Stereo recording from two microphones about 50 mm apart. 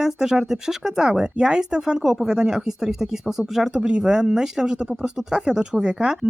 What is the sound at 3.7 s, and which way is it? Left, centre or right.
Speech, right.